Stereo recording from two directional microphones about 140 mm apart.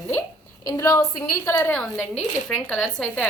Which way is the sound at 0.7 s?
25° left (ahead or behind).